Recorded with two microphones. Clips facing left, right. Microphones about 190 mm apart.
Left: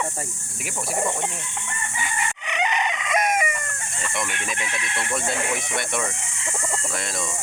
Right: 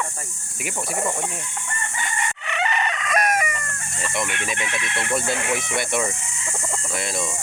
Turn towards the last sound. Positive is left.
turn(degrees=-5)  # may be behind; listen again after turning